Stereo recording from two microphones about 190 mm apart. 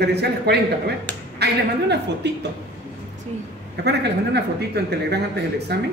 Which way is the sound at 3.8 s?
60° right (ahead or behind).